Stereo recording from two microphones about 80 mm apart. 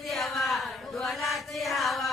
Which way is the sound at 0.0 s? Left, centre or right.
Centre.